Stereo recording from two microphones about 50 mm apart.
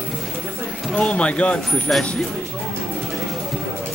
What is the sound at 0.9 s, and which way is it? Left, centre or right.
Speech, left.